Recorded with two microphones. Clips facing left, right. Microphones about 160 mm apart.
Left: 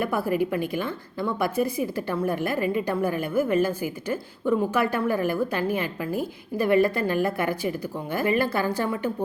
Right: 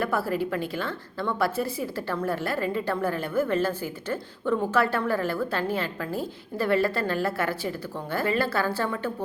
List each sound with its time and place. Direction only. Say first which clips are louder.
0.0 s a woman's voice: left 2 dB; 15° left (ahead or behind)